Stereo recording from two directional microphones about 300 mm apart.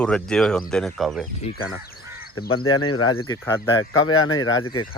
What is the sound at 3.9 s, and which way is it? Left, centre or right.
Speech, left.